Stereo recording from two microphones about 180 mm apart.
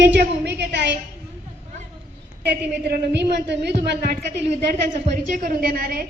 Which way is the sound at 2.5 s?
65° right (ahead or behind).